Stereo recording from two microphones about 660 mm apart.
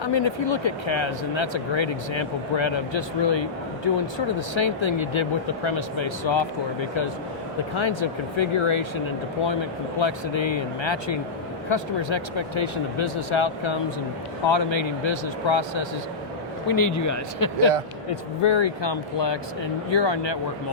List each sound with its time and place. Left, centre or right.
0.0 s speech: left
7.8 s speech: left
10.0 s speech: left
16.6 s speech: left
18.1 s speech: left